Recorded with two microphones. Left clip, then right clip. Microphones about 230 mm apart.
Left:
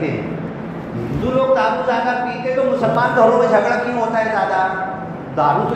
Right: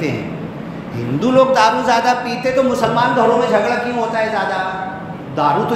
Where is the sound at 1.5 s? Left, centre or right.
Right.